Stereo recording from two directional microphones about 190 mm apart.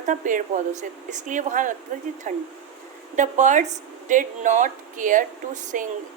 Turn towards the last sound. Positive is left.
turn(degrees=-40)  # may be behind; listen again after turning